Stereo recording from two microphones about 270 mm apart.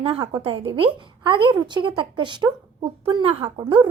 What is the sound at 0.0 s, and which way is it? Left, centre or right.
A woman's voice, centre.